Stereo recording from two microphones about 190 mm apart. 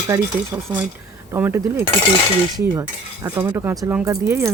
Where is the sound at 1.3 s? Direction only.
10° right (ahead or behind).